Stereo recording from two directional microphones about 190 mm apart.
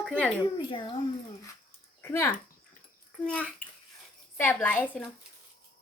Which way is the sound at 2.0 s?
15° left (ahead or behind).